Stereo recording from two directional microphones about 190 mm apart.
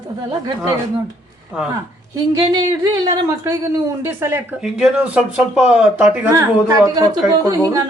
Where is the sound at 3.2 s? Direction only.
15° right (ahead or behind).